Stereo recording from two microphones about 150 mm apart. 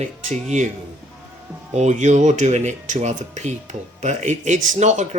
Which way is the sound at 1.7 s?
50° right (ahead or behind).